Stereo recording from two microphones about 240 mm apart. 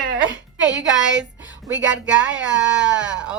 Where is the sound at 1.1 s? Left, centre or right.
Centre.